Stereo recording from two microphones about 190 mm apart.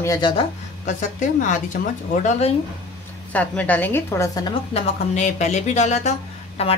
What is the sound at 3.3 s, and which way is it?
A woman's voice, 10° left (ahead or behind).